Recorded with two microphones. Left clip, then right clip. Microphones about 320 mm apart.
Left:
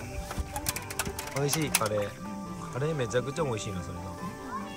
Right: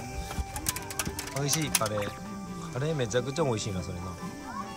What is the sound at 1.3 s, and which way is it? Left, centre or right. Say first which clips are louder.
Speech: left 1 dB; centre.